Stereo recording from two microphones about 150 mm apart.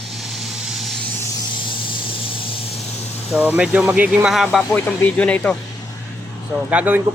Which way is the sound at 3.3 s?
10° right (ahead or behind).